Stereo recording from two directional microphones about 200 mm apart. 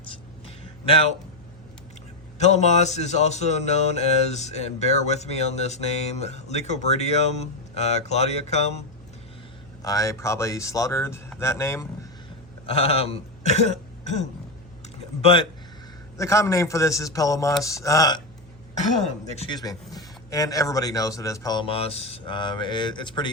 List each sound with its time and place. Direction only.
0.1 s a sound: 30° left (ahead or behind)
2.4 s music: 35° left (ahead or behind)
9.8 s speech: 15° left (ahead or behind)
12.6 s speech: 30° left (ahead or behind)
15.2 s speech: 30° left (ahead or behind)
16.1 s speech: 15° left (ahead or behind)
19.4 s speech: 20° left (ahead or behind)